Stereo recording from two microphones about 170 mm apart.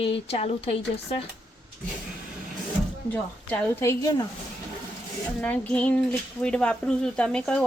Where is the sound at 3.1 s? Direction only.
10° left (ahead or behind).